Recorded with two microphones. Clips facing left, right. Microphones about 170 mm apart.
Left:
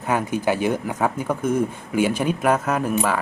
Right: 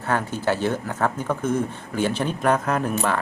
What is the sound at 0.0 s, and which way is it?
Speech, 10° left (ahead or behind).